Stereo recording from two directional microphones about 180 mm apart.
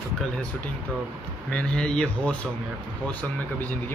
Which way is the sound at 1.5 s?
5° left (ahead or behind).